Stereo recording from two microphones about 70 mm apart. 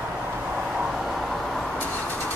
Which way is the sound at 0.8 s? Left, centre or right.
Centre.